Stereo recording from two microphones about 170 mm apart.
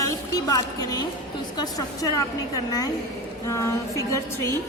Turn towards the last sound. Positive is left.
turn(degrees=20)  # may be behind; listen again after turning